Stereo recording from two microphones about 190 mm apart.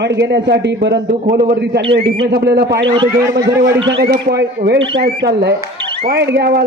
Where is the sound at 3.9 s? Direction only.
60° right (ahead or behind).